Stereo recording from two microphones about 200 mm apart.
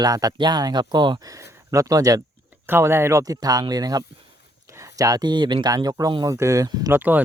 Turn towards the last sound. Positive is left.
turn(degrees=-10)  # may be behind; listen again after turning